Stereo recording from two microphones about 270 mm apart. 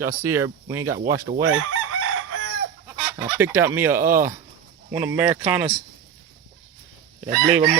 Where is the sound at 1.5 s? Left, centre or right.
Right.